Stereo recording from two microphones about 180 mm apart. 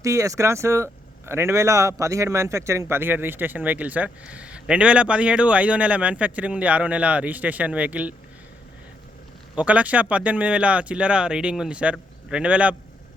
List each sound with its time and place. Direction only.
0.0 s a man's voice: 15° right (ahead or behind)
9.6 s a man's voice: 5° right (ahead or behind)